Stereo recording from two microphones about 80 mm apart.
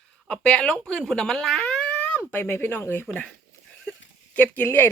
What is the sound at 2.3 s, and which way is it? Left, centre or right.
Speech, left.